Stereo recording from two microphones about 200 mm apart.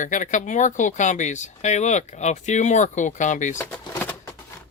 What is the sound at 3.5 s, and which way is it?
Speech, 10° left (ahead or behind).